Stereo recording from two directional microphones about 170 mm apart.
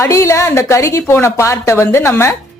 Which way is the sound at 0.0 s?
15° left (ahead or behind).